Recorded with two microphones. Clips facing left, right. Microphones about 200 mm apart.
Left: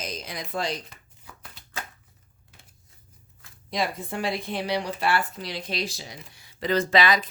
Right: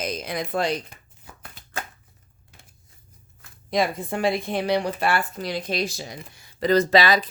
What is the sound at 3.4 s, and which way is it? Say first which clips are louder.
Speech: right 5 dB; 50° right (ahead or behind).